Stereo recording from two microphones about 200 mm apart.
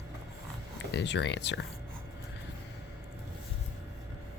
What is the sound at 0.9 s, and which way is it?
Speech, 60° left (ahead or behind).